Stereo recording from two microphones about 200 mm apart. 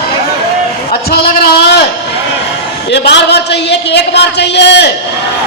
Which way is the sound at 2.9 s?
55° left (ahead or behind).